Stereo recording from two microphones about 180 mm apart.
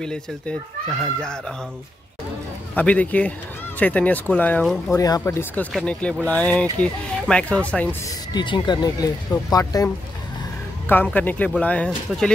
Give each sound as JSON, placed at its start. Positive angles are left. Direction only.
{"t": 0.0, "sound": "speech", "side_deg": 5}
{"t": 2.7, "sound": "speech", "side_deg": 10}
{"t": 4.9, "sound": "speech", "side_deg": 20}
{"t": 8.3, "sound": "speech", "side_deg": 25}
{"t": 10.9, "sound": "speech", "side_deg": 10}